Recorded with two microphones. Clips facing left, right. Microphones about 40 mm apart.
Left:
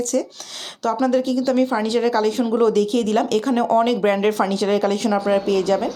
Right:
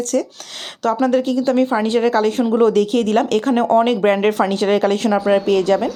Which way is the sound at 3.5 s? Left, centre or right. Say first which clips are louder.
Right 3 dB; right.